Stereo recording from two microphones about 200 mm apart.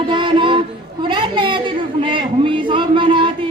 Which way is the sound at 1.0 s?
25° right (ahead or behind).